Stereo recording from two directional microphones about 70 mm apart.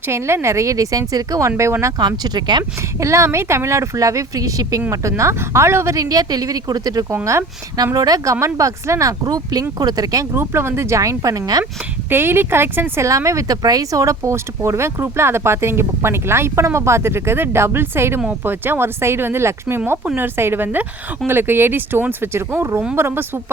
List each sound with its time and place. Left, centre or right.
0.1 s speech: right
1.5 s speech: right
2.0 s speech: right
3.0 s speech: right
4.9 s speech: right
6.0 s speech: right
9.2 s speech: right
10.3 s speech: right
12.1 s speech: right
13.0 s speech: right